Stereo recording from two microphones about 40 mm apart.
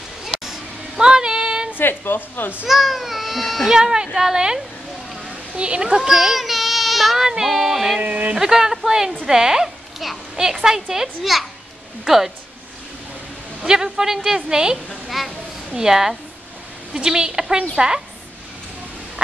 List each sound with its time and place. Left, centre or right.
0.2 s a sound: centre
1.8 s a woman's voice: left
2.6 s speech: centre
3.7 s a woman's voice: centre
5.6 s a woman's voice: right
6.0 s child singing: centre
7.4 s speech: centre
8.0 s speech: right
8.4 s a woman's voice: centre
13.6 s a woman's voice: centre
15.0 s speech: centre
15.7 s a woman's voice: centre